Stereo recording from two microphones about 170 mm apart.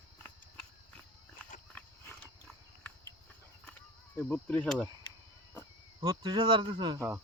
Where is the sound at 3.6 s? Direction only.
10° left (ahead or behind).